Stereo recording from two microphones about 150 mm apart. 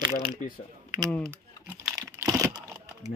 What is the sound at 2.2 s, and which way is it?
Computer keyboard, 15° right (ahead or behind).